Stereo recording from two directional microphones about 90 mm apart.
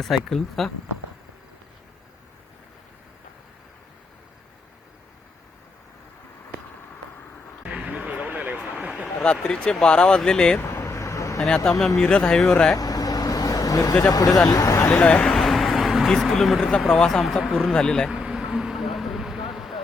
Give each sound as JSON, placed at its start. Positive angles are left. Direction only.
{"t": 0.0, "sound": "speech", "side_deg": 5}
{"t": 7.6, "sound": "a sound", "side_deg": -15}
{"t": 9.2, "sound": "speech", "side_deg": 10}
{"t": 10.6, "sound": "vehicle", "side_deg": 25}
{"t": 11.3, "sound": "speech", "side_deg": 10}
{"t": 12.7, "sound": "speech", "side_deg": 45}
{"t": 14.9, "sound": "a sound", "side_deg": 15}
{"t": 16.9, "sound": "speech", "side_deg": 5}
{"t": 18.1, "sound": "vehicle", "side_deg": -10}
{"t": 19.5, "sound": "a sound", "side_deg": -5}